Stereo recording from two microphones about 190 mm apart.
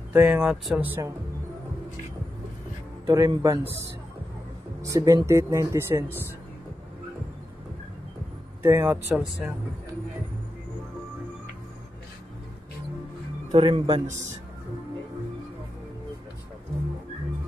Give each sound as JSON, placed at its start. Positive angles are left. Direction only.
{"t": 0.1, "sound": "speech", "side_deg": -10}
{"t": 3.1, "sound": "speech", "side_deg": -15}
{"t": 4.8, "sound": "speech", "side_deg": -15}
{"t": 8.6, "sound": "speech", "side_deg": -15}
{"t": 13.5, "sound": "a man's voice", "side_deg": -30}